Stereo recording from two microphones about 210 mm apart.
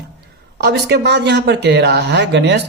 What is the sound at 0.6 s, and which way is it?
A man's voice, 55° right (ahead or behind).